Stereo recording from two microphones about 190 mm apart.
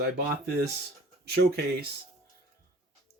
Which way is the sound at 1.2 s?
55° right (ahead or behind).